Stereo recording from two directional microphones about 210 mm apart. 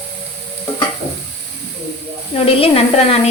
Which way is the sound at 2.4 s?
25° left (ahead or behind).